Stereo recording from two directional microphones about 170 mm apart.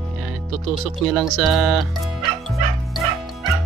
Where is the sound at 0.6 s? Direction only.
Centre (ahead or behind).